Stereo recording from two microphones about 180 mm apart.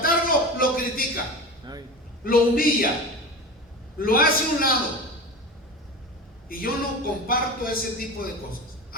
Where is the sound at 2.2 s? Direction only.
55° left (ahead or behind).